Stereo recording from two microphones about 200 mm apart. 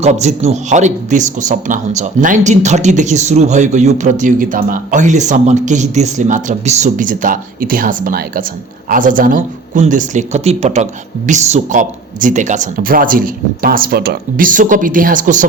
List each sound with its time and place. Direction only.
0.0 s speech: 35° right (ahead or behind)